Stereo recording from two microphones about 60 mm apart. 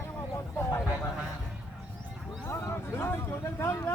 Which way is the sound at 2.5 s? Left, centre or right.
Left.